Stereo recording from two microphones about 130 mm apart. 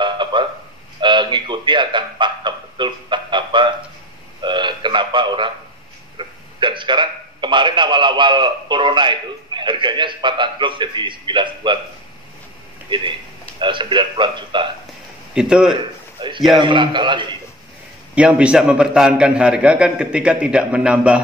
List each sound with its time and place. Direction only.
0.0 s a sound: 40° right (ahead or behind)
6.1 s a man's voice: 40° right (ahead or behind)
13.6 s speech: 40° right (ahead or behind)
15.3 s a man's voice: 5° right (ahead or behind)
16.2 s a sound: 35° right (ahead or behind)
16.5 s speech: 35° right (ahead or behind)
18.1 s a man's voice: 10° right (ahead or behind)